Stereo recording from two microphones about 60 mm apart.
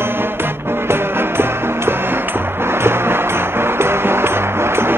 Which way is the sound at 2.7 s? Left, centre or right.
Right.